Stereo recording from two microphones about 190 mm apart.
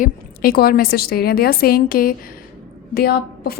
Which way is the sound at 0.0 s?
50° left (ahead or behind).